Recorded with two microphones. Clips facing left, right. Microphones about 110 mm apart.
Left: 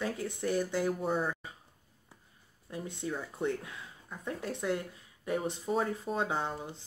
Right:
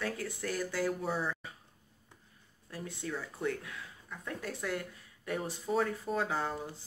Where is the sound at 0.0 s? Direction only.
20° left (ahead or behind).